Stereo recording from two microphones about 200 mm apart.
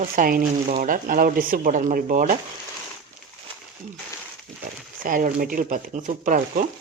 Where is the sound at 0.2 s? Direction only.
45° right (ahead or behind).